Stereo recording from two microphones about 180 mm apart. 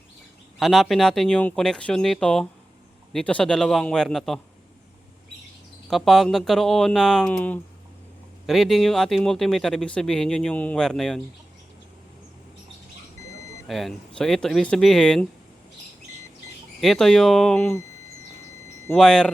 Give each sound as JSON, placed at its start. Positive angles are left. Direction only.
{"t": 0.6, "sound": "speech", "side_deg": 0}
{"t": 5.9, "sound": "speech", "side_deg": 0}
{"t": 13.2, "sound": "vehicle", "side_deg": 15}
{"t": 13.7, "sound": "speech", "side_deg": 0}
{"t": 16.8, "sound": "speech", "side_deg": 0}
{"t": 18.9, "sound": "speech", "side_deg": 5}